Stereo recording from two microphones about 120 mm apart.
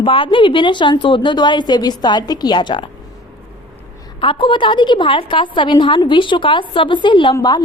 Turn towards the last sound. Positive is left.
turn(degrees=35)  # may be behind; listen again after turning